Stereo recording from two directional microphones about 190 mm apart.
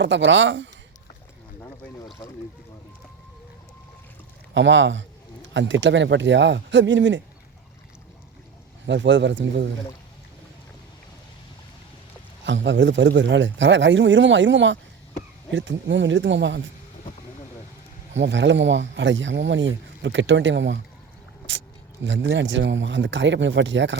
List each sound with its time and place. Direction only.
0.0 s speech: 75° right (ahead or behind)
4.5 s speech: 75° right (ahead or behind)
8.9 s speech: 70° right (ahead or behind)
12.5 s speech: 75° right (ahead or behind)
18.1 s speech: 75° right (ahead or behind)